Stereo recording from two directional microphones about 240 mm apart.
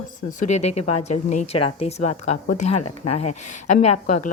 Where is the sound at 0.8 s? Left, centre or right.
Left.